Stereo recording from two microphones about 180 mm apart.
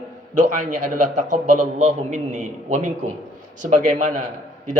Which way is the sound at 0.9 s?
45° right (ahead or behind).